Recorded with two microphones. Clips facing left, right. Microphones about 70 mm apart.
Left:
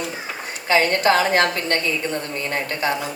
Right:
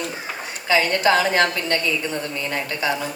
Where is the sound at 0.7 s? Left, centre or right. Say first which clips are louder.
Left 1 dB; left.